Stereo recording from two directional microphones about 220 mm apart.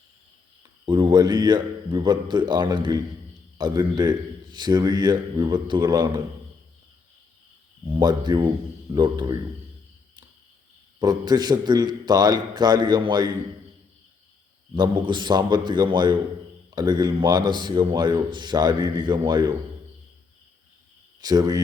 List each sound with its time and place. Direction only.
0.9 s a man's voice: 20° right (ahead or behind)
7.9 s a man's voice: 20° right (ahead or behind)
11.0 s a man's voice: 20° right (ahead or behind)
14.8 s a man's voice: 20° right (ahead or behind)
21.2 s a man's voice: 15° right (ahead or behind)